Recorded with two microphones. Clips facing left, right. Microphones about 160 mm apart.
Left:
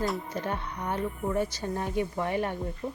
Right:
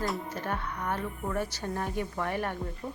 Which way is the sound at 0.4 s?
15° left (ahead or behind).